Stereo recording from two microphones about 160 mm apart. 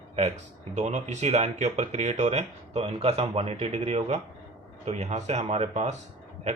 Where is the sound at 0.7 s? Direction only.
45° right (ahead or behind).